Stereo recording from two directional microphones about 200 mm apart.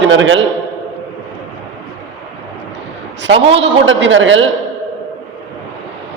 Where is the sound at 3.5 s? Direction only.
65° right (ahead or behind).